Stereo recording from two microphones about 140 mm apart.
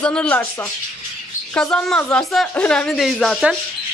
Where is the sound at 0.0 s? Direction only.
5° left (ahead or behind).